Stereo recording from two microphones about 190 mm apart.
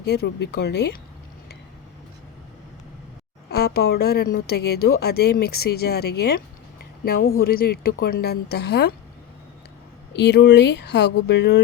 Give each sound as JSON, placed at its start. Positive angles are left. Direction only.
{"t": 0.0, "sound": "a woman's voice", "side_deg": 60}
{"t": 3.5, "sound": "a woman's voice", "side_deg": 55}
{"t": 10.1, "sound": "a woman's voice", "side_deg": 65}